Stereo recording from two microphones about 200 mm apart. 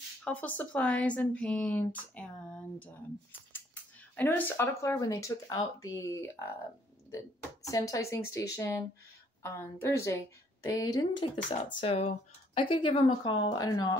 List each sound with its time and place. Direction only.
0.2 s speech: 10° left (ahead or behind)